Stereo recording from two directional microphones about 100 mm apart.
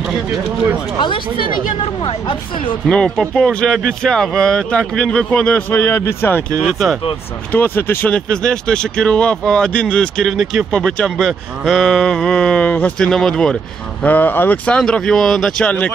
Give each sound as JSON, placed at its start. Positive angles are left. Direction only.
{"t": 2.0, "sound": "speech", "side_deg": 55}
{"t": 2.9, "sound": "speech", "side_deg": 10}
{"t": 5.8, "sound": "speech", "side_deg": 25}
{"t": 6.6, "sound": "speech", "side_deg": 0}
{"t": 7.5, "sound": "speech", "side_deg": 20}
{"t": 8.1, "sound": "speech", "side_deg": 10}
{"t": 14.0, "sound": "speech", "side_deg": 15}
{"t": 15.6, "sound": "speech", "side_deg": 15}